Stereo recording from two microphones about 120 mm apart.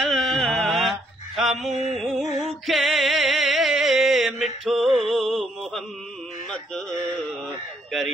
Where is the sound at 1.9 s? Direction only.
Centre (ahead or behind).